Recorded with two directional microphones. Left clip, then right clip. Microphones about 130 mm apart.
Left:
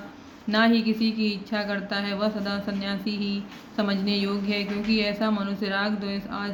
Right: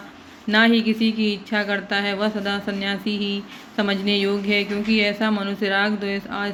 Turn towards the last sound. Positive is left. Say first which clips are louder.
# right 6 dB
turn(degrees=-40)  # may be behind; listen again after turning